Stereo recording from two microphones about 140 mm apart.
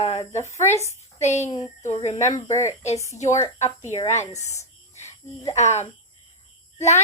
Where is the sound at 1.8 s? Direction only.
55° left (ahead or behind).